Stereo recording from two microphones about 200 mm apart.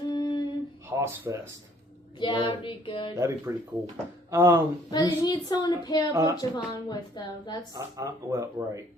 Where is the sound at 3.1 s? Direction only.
15° right (ahead or behind).